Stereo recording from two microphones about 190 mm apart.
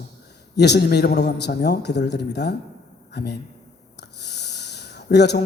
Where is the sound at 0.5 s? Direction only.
60° left (ahead or behind).